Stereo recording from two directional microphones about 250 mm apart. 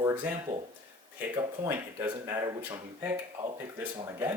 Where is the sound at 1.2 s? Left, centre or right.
Centre.